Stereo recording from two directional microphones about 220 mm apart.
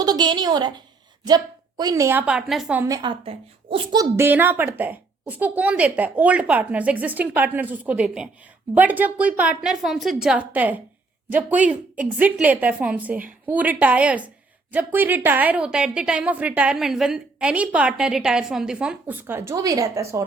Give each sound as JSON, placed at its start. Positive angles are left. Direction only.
{"t": 0.0, "sound": "a woman's voice", "side_deg": -20}
{"t": 2.8, "sound": "a woman's voice", "side_deg": -20}
{"t": 4.2, "sound": "a woman's voice", "side_deg": -10}